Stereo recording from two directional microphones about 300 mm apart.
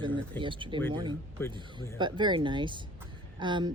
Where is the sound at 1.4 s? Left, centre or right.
Centre.